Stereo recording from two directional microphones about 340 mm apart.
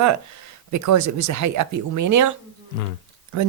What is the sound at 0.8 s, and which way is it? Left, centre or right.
Speech, right.